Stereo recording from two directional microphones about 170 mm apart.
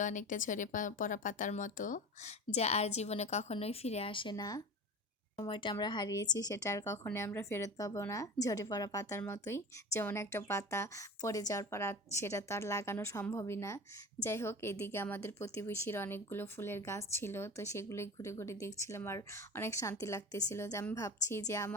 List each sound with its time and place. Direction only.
0.0 s a woman's voice: 50° left (ahead or behind); by 21.8 s 15° left (ahead or behind)